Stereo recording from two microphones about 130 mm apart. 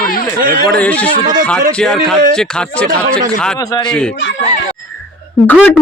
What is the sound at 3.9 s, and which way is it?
Speech, 5° left (ahead or behind).